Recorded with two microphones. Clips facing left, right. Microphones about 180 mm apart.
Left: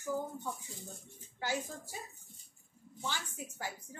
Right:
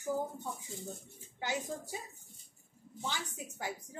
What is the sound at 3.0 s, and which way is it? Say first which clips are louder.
Speech: right 1 dB; 20° right (ahead or behind).